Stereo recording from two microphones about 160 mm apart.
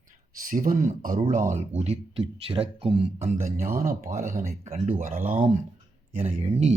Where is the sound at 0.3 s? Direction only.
60° right (ahead or behind).